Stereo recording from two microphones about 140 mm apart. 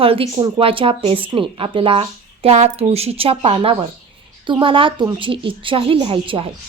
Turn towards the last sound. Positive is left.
turn(degrees=-40)  # may be behind; listen again after turning